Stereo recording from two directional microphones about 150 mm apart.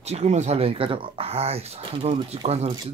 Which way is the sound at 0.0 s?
45° right (ahead or behind).